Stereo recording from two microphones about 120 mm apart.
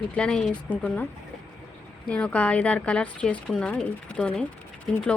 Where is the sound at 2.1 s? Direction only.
10° left (ahead or behind).